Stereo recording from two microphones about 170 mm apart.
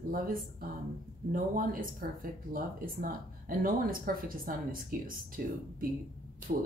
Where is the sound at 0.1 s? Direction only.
55° right (ahead or behind).